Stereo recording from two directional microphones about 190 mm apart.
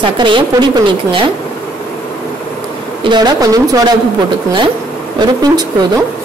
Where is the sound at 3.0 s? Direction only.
20° right (ahead or behind).